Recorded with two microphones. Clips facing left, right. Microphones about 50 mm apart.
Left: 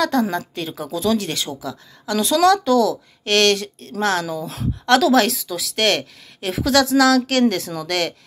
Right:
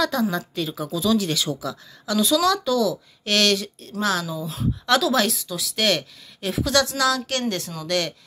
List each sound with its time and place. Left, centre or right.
0.0 s speech: left
1.5 s speech: left
2.0 s speech: left